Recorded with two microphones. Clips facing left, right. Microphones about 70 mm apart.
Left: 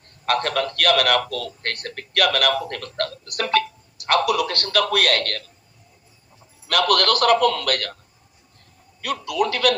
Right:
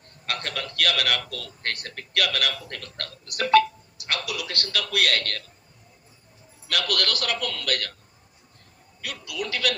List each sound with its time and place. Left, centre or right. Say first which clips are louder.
0.3 s a man's voice: left 10 dB; left
6.7 s a man's voice: left 8 dB; left
9.0 s a man's voice: left 10 dB; left